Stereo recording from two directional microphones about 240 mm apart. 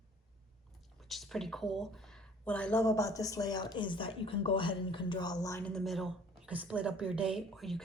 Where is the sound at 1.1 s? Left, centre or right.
Centre.